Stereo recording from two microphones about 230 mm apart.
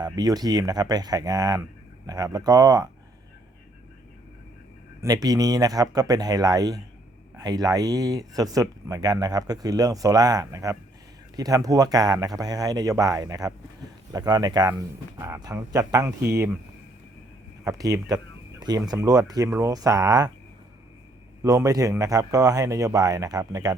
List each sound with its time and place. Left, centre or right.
0.0 s speech: centre
5.0 s speech: centre
17.6 s speech: centre
21.4 s speech: centre